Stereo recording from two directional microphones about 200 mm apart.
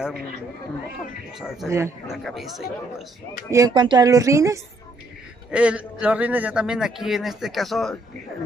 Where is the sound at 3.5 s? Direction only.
20° right (ahead or behind); by 8.0 s centre (ahead or behind).